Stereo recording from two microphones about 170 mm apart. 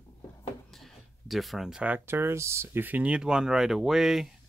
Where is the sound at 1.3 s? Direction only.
Centre (ahead or behind).